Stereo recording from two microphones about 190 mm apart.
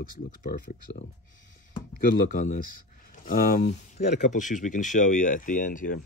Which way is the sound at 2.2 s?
45° left (ahead or behind).